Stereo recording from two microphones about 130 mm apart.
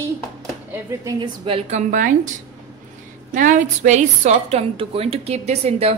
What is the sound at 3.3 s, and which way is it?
A woman's voice, 75° right (ahead or behind).